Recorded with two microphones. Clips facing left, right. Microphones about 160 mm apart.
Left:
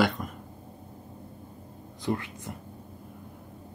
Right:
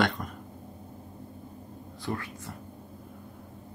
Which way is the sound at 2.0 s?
20° left (ahead or behind).